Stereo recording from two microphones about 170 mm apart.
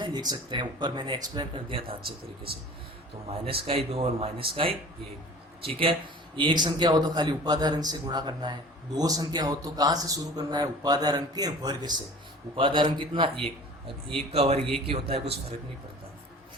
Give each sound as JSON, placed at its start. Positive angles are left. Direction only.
{"t": 0.0, "sound": "a man's voice", "side_deg": -25}
{"t": 3.2, "sound": "a man's voice", "side_deg": -35}